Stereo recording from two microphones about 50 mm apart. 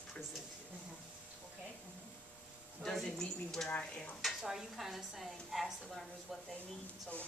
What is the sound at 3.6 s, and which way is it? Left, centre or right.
Speech, left.